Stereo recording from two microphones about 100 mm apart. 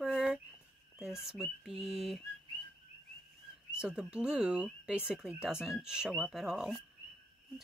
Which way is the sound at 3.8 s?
10° right (ahead or behind).